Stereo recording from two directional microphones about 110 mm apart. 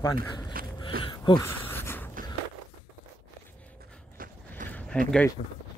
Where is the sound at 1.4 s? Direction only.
20° left (ahead or behind).